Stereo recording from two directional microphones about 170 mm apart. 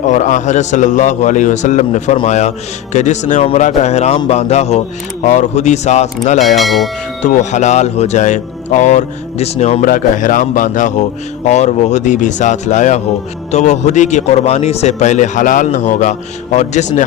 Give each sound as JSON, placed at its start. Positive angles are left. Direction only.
{"t": 0.0, "sound": "a man's voice", "side_deg": 45}
{"t": 6.6, "sound": "speech", "side_deg": 0}
{"t": 7.2, "sound": "a man's voice", "side_deg": 45}
{"t": 9.8, "sound": "a man's voice", "side_deg": 55}